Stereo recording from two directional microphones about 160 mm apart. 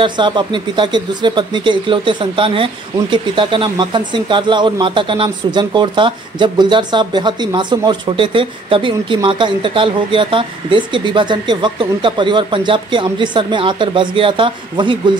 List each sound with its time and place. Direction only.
0.0 s speech: 30° right (ahead or behind)